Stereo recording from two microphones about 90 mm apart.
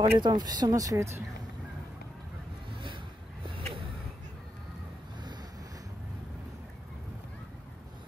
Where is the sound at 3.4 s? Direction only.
70° right (ahead or behind).